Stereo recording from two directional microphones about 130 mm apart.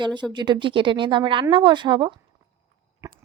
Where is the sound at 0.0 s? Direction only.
35° right (ahead or behind).